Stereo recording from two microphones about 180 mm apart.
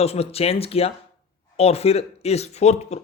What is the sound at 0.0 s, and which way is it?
Speech, 35° left (ahead or behind).